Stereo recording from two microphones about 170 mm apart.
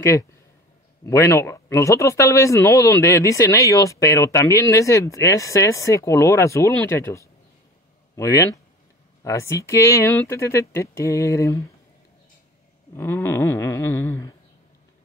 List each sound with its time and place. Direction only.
1.0 s speech: 15° left (ahead or behind)
12.9 s speech: 10° left (ahead or behind)